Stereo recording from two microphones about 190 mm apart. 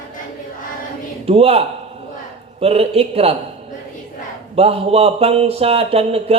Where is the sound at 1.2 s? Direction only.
30° right (ahead or behind).